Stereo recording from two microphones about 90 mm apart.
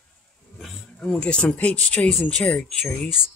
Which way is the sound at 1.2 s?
10° left (ahead or behind).